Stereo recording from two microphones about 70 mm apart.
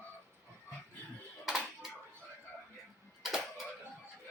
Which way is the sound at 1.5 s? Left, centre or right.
Centre.